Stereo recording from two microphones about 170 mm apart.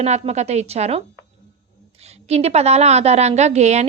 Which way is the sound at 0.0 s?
40° right (ahead or behind).